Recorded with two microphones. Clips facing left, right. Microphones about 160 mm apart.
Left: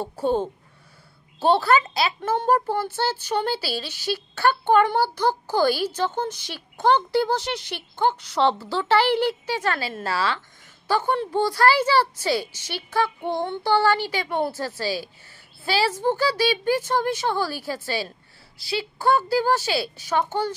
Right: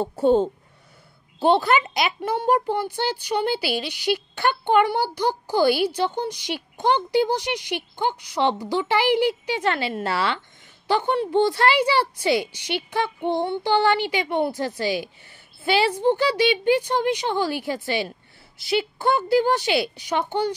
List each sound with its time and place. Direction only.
0.0 s speech: 25° right (ahead or behind)